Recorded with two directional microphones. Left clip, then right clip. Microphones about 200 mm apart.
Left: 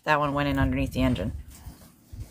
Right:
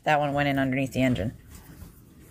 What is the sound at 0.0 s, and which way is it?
Speech, centre (ahead or behind).